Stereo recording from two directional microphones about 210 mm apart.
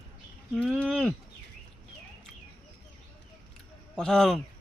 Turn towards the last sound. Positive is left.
turn(degrees=0)  # may be behind; listen again after turning